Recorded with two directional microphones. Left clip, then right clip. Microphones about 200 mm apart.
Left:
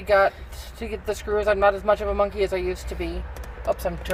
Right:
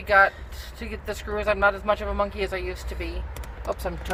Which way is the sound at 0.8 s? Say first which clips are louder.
Left 5 dB; 10° left (ahead or behind).